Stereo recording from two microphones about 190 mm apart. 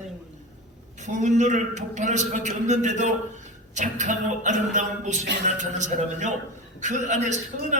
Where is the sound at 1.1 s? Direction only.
40° right (ahead or behind).